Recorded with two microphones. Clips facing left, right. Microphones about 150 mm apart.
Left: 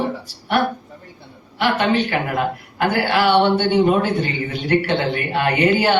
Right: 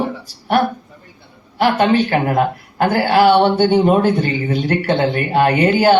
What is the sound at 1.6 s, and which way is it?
A woman's voice, 40° right (ahead or behind).